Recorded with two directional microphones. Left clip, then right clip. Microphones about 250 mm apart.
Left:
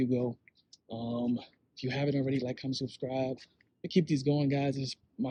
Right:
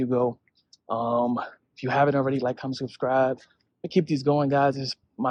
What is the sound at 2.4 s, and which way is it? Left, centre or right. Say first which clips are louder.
Speech: right 8 dB; centre.